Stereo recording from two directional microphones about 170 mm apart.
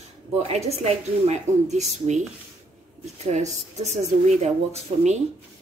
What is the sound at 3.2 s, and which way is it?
A woman's voice, 40° right (ahead or behind).